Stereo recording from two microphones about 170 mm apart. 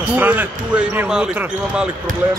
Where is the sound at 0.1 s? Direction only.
10° right (ahead or behind).